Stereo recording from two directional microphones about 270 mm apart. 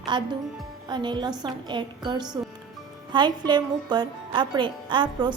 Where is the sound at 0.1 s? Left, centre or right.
Centre.